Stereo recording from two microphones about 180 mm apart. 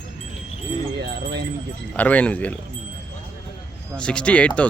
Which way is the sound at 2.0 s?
10° left (ahead or behind).